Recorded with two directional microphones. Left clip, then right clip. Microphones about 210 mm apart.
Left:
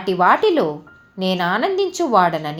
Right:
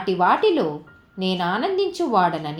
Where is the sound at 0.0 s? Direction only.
20° left (ahead or behind).